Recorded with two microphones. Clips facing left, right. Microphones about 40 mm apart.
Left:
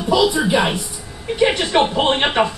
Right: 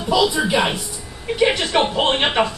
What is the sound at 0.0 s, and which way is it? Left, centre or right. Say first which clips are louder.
A man's voice: left 2 dB; centre.